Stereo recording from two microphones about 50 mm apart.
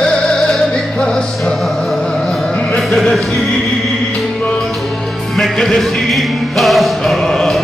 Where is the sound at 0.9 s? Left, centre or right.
Centre.